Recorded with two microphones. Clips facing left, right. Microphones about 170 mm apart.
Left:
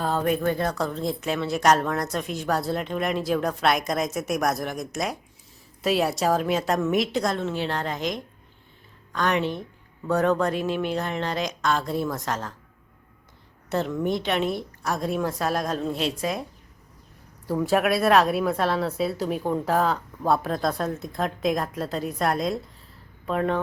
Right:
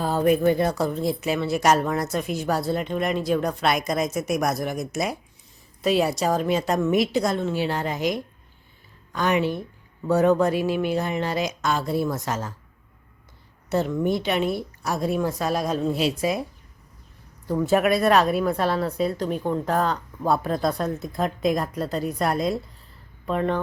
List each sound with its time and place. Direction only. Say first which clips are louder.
0.0 s a woman's voice: right 4 dB; 5° right (ahead or behind)
13.7 s a woman's voice: right 2 dB; centre (ahead or behind)
17.5 s a woman's voice: right 2 dB; centre (ahead or behind)